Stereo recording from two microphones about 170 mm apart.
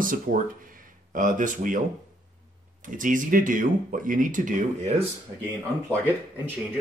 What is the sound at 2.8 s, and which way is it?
Speech, 50° right (ahead or behind).